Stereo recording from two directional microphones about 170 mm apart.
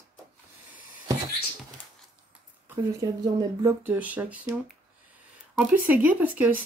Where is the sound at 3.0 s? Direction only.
20° right (ahead or behind).